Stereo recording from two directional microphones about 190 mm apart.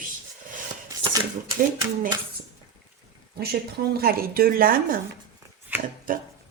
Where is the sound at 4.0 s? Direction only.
50° right (ahead or behind).